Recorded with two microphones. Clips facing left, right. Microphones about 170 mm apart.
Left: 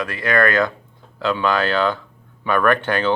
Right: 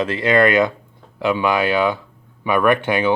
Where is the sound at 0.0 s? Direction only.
25° right (ahead or behind).